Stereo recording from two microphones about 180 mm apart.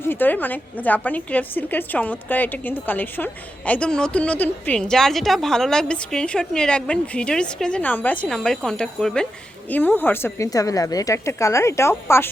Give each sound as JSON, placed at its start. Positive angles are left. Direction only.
{"t": 0.1, "sound": "a woman's voice", "side_deg": 10}